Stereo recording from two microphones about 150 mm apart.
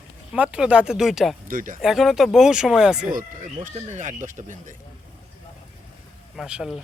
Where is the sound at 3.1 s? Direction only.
60° right (ahead or behind).